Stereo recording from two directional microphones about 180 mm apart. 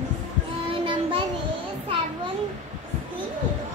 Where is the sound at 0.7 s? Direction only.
30° right (ahead or behind).